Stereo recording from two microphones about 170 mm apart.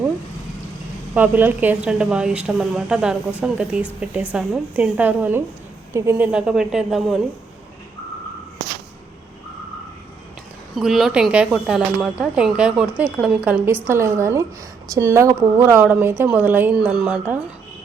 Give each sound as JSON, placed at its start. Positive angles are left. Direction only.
{"t": 1.1, "sound": "a woman's voice", "side_deg": -10}
{"t": 10.8, "sound": "a woman's voice", "side_deg": 0}